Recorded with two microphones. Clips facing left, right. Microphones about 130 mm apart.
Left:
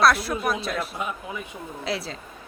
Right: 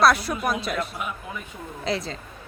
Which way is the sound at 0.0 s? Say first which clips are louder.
Right 1 dB; centre (ahead or behind).